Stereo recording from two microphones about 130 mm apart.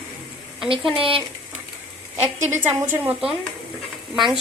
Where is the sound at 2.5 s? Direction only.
20° right (ahead or behind).